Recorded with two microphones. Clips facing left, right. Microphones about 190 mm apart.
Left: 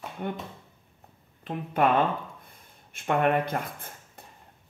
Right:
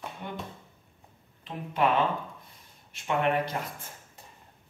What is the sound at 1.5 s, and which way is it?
Speech, 55° left (ahead or behind).